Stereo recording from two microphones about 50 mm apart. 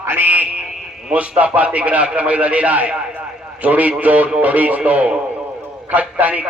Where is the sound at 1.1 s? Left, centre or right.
Right.